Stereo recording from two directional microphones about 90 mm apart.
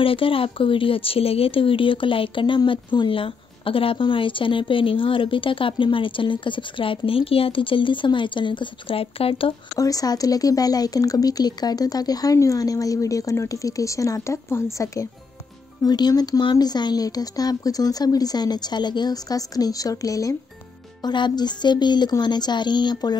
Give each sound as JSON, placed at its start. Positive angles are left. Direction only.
{"t": 0.0, "sound": "speech", "side_deg": 85}
{"t": 9.8, "sound": "speech", "side_deg": 40}
{"t": 15.8, "sound": "speech", "side_deg": 45}
{"t": 21.0, "sound": "speech", "side_deg": 55}